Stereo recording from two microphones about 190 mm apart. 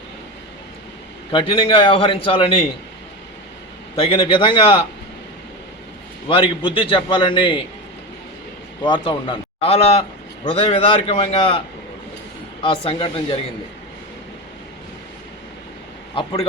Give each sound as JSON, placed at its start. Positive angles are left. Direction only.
{"t": 1.3, "sound": "speech", "side_deg": 25}
{"t": 3.9, "sound": "speech", "side_deg": 30}
{"t": 6.2, "sound": "speech", "side_deg": 25}
{"t": 8.8, "sound": "speech", "side_deg": 25}
{"t": 12.6, "sound": "speech", "side_deg": 30}
{"t": 16.1, "sound": "speech", "side_deg": 30}